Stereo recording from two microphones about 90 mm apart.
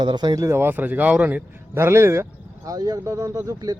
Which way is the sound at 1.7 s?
30° right (ahead or behind).